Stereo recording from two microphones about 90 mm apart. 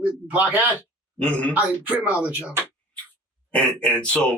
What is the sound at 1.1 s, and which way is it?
Speech, 15° left (ahead or behind).